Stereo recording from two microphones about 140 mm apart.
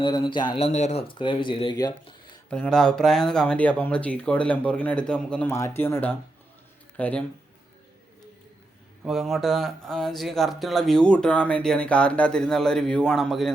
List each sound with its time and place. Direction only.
0.0 s speech: 35° left (ahead or behind)
0.6 s speech: 50° left (ahead or behind)
1.2 s speech: 35° left (ahead or behind)
2.5 s speech: 5° left (ahead or behind)
9.0 s speech: centre (ahead or behind)